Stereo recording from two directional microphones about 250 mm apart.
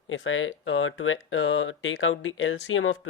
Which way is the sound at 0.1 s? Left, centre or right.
Left.